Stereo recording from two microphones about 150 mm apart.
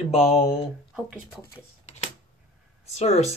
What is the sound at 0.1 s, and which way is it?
Speech, 45° left (ahead or behind).